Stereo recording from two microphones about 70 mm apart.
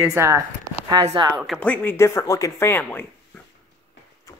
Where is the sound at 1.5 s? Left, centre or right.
Left.